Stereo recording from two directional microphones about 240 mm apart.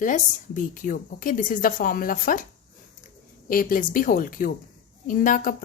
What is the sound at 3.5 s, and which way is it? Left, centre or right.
Speech, left.